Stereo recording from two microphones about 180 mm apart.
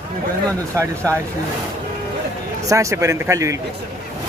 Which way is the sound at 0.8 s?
15° right (ahead or behind).